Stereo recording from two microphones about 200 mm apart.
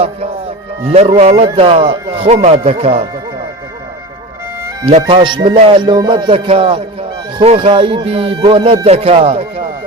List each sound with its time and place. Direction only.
0.9 s a man's voice: 30° right (ahead or behind)
4.9 s speech: 30° right (ahead or behind)